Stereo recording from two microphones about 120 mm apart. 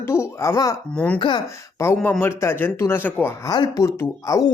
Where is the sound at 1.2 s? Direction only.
40° left (ahead or behind).